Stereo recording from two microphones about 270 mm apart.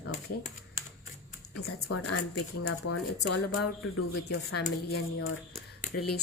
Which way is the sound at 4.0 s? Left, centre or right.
Left.